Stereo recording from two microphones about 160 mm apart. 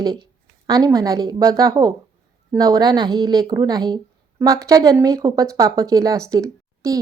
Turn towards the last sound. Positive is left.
turn(degrees=-20)  # may be behind; listen again after turning